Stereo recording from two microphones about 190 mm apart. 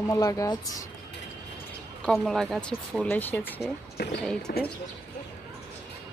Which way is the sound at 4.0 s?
60° left (ahead or behind).